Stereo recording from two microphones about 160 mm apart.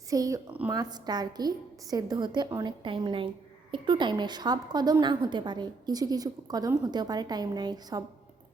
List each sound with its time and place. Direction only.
0.1 s a woman's voice: 20° right (ahead or behind)
2.8 s a woman's voice: 30° right (ahead or behind)